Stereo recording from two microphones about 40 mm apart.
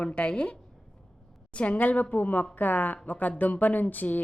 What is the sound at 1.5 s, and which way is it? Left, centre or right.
A woman's voice, left.